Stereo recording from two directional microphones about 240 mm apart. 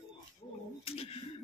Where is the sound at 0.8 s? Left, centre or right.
Left.